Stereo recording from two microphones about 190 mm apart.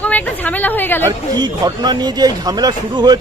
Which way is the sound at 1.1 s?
20° right (ahead or behind).